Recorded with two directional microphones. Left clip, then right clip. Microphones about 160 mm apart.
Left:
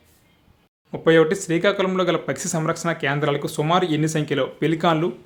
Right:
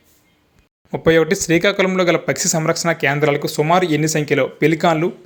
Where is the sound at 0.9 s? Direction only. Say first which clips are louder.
Right 2 dB; 25° right (ahead or behind).